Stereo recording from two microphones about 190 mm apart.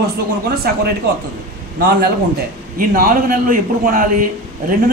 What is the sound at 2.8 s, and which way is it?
Speech, 50° right (ahead or behind).